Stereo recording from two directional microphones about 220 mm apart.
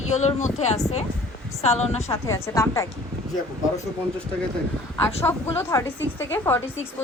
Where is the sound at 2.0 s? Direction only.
15° left (ahead or behind).